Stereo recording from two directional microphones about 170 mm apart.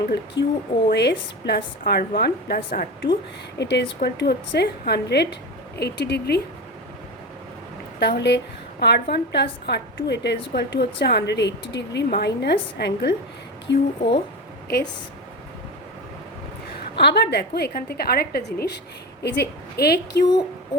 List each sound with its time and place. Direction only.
0.4 s a woman's voice: 90° left
0.9 s a woman's voice: 80° left; by 3.1 s 60° left (ahead or behind)
3.6 s a woman's voice: 85° left
7.9 s a woman's voice: 80° left
13.7 s a woman's voice: 90° left
16.9 s a woman's voice: 80° left